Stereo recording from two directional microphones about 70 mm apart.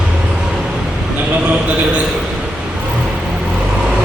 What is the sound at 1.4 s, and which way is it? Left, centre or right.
Speech, centre.